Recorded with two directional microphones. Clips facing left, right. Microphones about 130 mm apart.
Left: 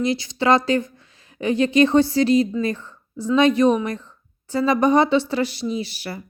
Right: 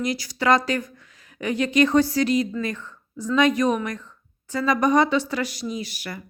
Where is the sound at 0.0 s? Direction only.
25° left (ahead or behind).